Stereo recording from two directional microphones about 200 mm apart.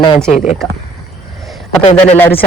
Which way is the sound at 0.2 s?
5° left (ahead or behind).